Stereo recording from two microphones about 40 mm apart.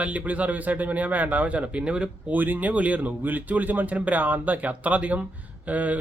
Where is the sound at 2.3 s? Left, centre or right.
Right.